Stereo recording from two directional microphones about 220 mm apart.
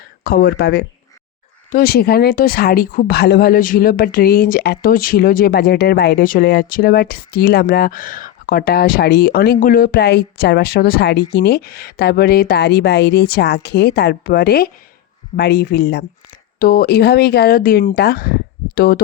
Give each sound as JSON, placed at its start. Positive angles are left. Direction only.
{"t": 0.3, "sound": "speech", "side_deg": 40}